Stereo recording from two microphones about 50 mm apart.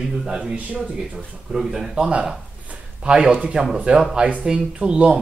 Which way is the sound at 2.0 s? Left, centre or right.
Centre.